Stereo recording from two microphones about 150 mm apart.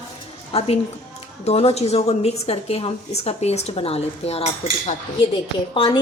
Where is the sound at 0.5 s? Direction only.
40° left (ahead or behind).